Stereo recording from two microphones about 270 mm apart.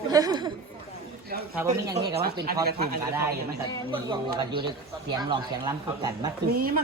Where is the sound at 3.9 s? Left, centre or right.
Centre.